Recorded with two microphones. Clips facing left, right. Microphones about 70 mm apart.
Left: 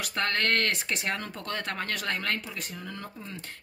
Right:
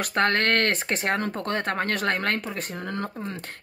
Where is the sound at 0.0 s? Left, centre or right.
Right.